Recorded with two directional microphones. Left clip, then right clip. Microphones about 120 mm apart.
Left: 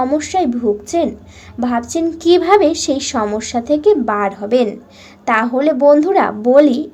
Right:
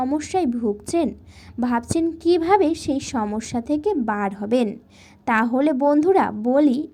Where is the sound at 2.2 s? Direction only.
25° right (ahead or behind).